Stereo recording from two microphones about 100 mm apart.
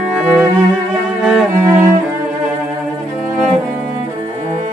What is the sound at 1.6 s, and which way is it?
Cello, 25° right (ahead or behind).